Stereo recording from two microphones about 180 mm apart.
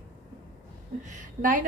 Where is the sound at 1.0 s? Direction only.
45° right (ahead or behind).